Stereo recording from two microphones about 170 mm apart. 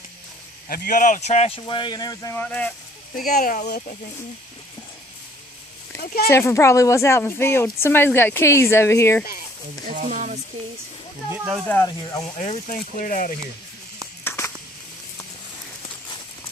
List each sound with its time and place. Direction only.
0.7 s speech: 55° left (ahead or behind); by 2.3 s 25° left (ahead or behind)
2.3 s speech: 10° left (ahead or behind)
3.2 s speech: 55° left (ahead or behind)
3.6 s speech: 75° left (ahead or behind)
6.0 s speech: 60° left (ahead or behind)
6.3 s speech: 15° left (ahead or behind)
9.9 s speech: 45° right (ahead or behind)
11.7 s speech: 15° left (ahead or behind)
12.4 s speech: 45° left (ahead or behind)
14.3 s a sound: 15° left (ahead or behind)